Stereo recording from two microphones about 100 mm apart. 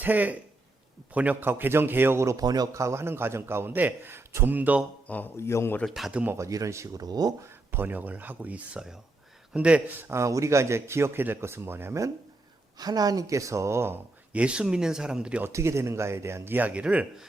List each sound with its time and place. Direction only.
0.0 s a man's voice: 15° right (ahead or behind)
2.4 s a man's voice: 40° right (ahead or behind); by 4.8 s 15° right (ahead or behind)
5.0 s speech: 15° left (ahead or behind)
5.8 s speech: centre (ahead or behind)
6.3 s speech: 30° right (ahead or behind)
7.4 s speech: 20° right (ahead or behind)
10.1 s a man's voice: 30° right (ahead or behind)
12.8 s speech: 40° right (ahead or behind)
14.3 s speech: 10° right (ahead or behind)
15.4 s a man's voice: 25° right (ahead or behind); by 17.2 s 10° right (ahead or behind)